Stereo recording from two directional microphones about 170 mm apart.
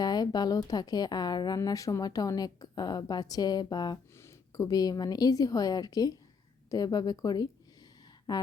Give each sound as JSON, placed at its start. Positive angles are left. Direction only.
{"t": 0.0, "sound": "speech", "side_deg": 25}